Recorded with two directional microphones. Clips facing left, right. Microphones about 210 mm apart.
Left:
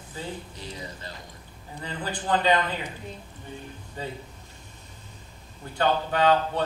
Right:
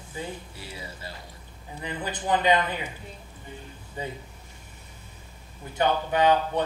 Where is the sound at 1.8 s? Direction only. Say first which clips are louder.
Right 1 dB; 20° right (ahead or behind).